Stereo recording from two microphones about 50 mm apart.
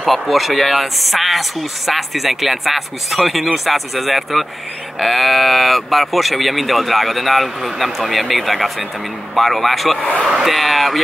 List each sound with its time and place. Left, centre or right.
0.0 s speech: centre
9.9 s speech: left
10.2 s speech: centre